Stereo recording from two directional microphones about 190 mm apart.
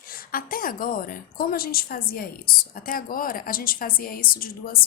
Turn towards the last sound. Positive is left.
turn(degrees=50)  # may be behind; listen again after turning